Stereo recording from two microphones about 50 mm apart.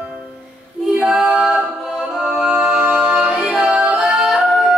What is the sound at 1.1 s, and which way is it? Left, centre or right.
A capella, centre.